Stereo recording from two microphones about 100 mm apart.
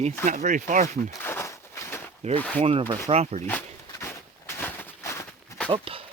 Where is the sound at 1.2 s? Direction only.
25° left (ahead or behind).